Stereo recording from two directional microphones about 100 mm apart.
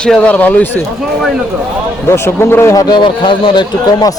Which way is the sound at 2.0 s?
25° left (ahead or behind).